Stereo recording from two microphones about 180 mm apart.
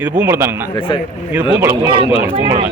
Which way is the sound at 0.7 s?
30° left (ahead or behind).